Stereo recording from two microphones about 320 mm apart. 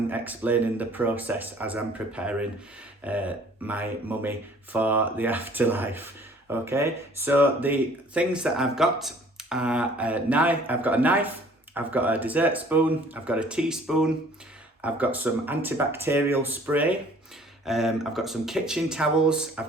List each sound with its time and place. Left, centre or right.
0.1 s speech: centre